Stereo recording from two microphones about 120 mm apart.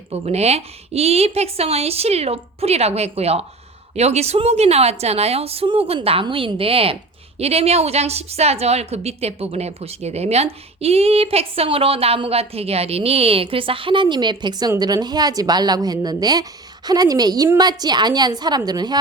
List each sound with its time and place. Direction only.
0.1 s a woman's voice: 60° right (ahead or behind); by 18.9 s 35° right (ahead or behind)